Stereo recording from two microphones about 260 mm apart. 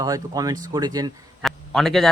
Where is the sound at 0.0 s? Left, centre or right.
Centre.